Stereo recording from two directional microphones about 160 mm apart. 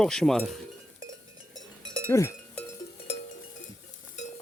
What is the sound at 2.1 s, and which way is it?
Speech, 20° left (ahead or behind).